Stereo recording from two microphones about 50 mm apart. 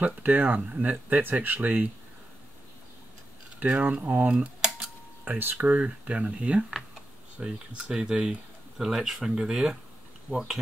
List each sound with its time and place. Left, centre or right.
0.0 s speech: right
1.2 s speech: right
3.5 s speech: right
5.4 s speech: right
5.8 s speech: right
7.4 s speech: centre